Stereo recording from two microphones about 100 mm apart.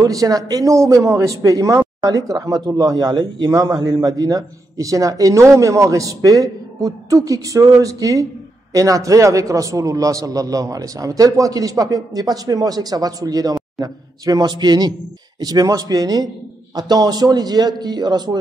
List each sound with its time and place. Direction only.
0.0 s a man's voice: 35° right (ahead or behind)